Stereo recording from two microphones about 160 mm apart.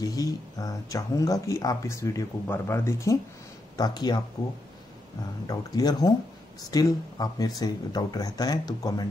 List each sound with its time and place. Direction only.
0.0 s speech: 25° left (ahead or behind)
5.5 s speech: 25° left (ahead or behind)